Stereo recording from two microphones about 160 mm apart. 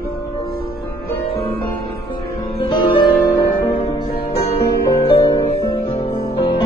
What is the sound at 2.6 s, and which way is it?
Music, 30° left (ahead or behind).